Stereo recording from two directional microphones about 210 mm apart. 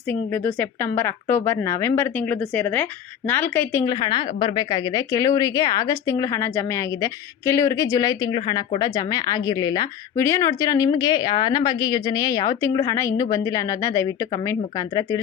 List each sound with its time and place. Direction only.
0.1 s a woman's voice: 10° left (ahead or behind)